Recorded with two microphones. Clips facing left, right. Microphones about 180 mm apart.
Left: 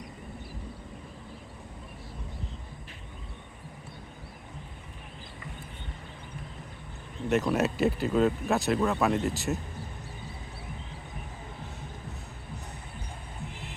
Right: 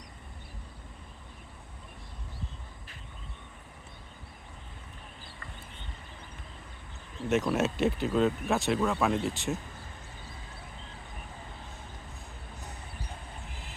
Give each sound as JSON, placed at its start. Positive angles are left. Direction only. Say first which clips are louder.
{"t": 7.3, "sound": "speech", "louder": "left 1 dB", "side_deg": 0}